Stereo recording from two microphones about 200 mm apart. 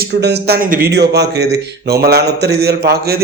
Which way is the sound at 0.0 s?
55° right (ahead or behind).